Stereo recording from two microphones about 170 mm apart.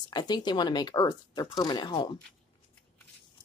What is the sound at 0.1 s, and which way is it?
Speech, 25° left (ahead or behind).